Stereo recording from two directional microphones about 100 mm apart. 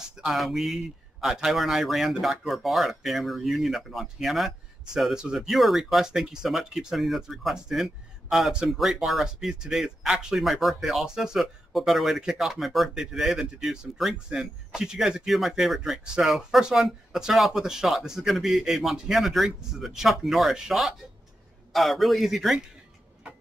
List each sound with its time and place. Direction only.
0.2 s speech: centre (ahead or behind)